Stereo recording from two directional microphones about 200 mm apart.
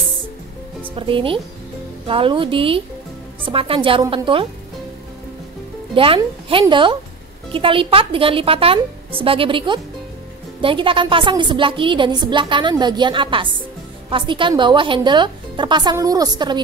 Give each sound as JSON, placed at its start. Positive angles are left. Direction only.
{"t": 0.9, "sound": "a woman's voice", "side_deg": -25}
{"t": 5.9, "sound": "a woman's voice", "side_deg": -25}